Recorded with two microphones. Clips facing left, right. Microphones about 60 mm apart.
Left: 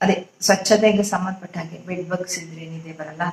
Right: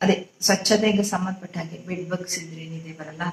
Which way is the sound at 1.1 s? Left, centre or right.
Left.